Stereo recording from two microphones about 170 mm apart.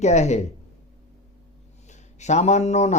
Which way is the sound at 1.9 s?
45° left (ahead or behind).